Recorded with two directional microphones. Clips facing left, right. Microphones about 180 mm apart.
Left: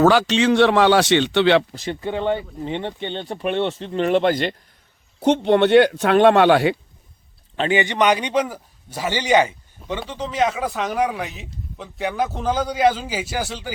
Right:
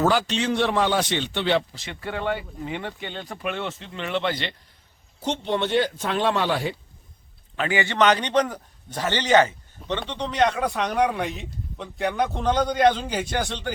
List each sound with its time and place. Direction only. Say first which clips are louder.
0.0 s speech: left 6 dB; 90° left
1.7 s speech: left 10 dB; 40° left (ahead or behind)
2.0 s speech: left 4 dB; 20° left (ahead or behind); by 4.5 s 45° left (ahead or behind)
5.2 s a man's voice: left 9 dB; 60° left (ahead or behind)
7.5 s a man's voice: left 5 dB; 25° left (ahead or behind); by 13.7 s 5° left (ahead or behind)